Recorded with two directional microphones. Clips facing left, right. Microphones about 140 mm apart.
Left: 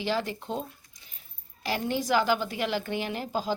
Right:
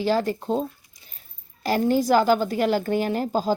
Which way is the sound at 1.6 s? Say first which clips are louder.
Right 8 dB; 40° right (ahead or behind).